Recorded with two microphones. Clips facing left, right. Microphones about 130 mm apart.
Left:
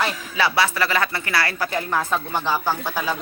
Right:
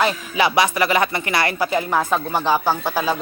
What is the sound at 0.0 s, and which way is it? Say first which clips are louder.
A woman's voice: right 4 dB; 15° right (ahead or behind).